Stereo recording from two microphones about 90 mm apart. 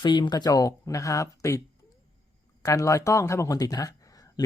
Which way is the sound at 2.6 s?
35° left (ahead or behind).